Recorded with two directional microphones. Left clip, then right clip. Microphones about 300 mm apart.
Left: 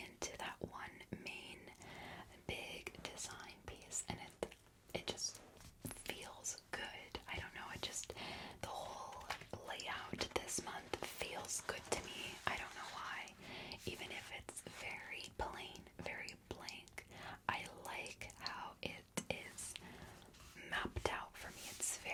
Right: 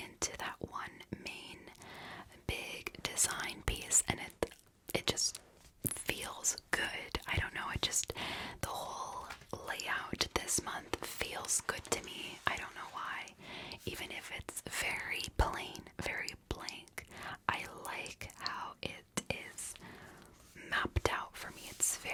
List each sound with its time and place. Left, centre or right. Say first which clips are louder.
0.0 s whispering: right 6 dB; right
3.7 s whispering: right 15 dB; right
4.0 s whispering: right 9 dB; right
20.6 s whispering: right 7 dB; right